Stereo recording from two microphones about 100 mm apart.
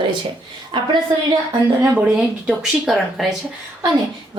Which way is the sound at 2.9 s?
Centre (ahead or behind).